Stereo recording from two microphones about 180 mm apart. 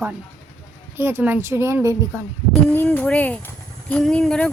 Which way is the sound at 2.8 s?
10° left (ahead or behind).